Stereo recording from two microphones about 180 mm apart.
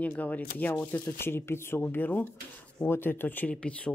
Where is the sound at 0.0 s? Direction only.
10° left (ahead or behind).